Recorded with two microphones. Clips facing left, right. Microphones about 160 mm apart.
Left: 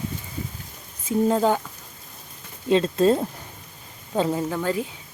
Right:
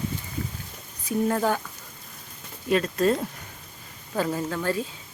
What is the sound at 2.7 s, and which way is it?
Speech, 25° left (ahead or behind).